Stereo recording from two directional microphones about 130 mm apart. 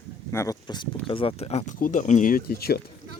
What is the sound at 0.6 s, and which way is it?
Speech, 35° left (ahead or behind).